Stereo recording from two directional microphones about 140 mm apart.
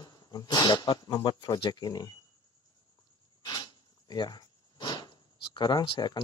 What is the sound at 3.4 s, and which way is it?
Speech, 30° left (ahead or behind).